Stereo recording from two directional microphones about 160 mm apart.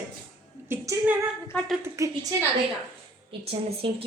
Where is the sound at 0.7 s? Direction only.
10° right (ahead or behind).